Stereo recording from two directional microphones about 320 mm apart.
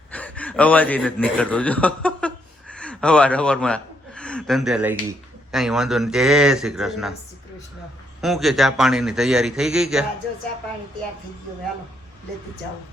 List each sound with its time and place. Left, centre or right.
0.1 s a man's voice: centre
8.2 s a man's voice: centre